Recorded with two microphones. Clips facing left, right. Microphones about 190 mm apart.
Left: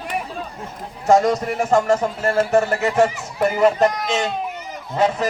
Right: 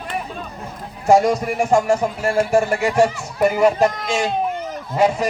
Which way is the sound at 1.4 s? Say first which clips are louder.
Right 1 dB; 10° right (ahead or behind).